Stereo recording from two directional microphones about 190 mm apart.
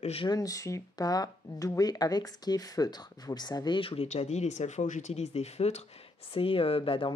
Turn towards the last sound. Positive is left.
turn(degrees=25)  # may be behind; listen again after turning